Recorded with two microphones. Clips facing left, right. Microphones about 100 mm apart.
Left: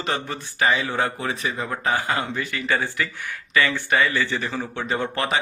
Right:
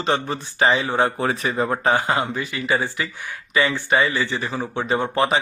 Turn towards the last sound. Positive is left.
turn(degrees=-20)  # may be behind; listen again after turning